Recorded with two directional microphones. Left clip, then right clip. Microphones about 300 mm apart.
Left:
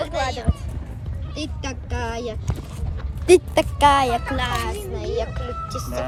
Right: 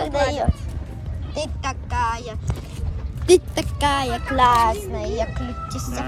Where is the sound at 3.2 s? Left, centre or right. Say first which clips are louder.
Left 2 dB; centre.